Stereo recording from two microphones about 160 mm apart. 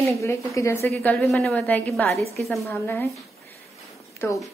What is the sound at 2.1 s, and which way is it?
Speech, 40° right (ahead or behind).